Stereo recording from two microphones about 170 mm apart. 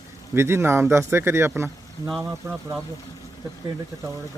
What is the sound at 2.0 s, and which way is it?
Speech, centre (ahead or behind).